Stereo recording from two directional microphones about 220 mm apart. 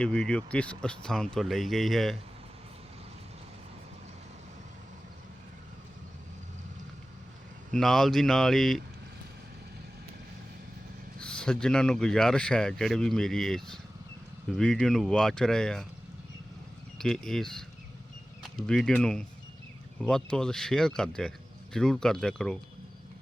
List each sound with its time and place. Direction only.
0.0 s speech: 5° left (ahead or behind)
7.7 s speech: centre (ahead or behind)
11.2 s speech: 5° left (ahead or behind)
17.0 s speech: centre (ahead or behind)